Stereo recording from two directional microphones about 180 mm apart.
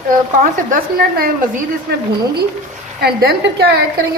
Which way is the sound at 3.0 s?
60° right (ahead or behind).